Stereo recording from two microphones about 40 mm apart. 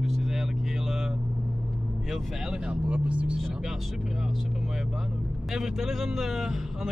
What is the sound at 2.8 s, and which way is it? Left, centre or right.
Speech, right.